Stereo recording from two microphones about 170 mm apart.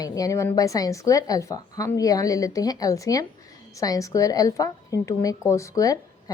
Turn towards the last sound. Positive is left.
turn(degrees=20)  # may be behind; listen again after turning